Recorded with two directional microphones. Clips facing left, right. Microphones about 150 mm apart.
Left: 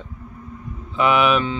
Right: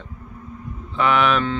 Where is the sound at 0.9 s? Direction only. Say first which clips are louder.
Left 1 dB; 10° left (ahead or behind).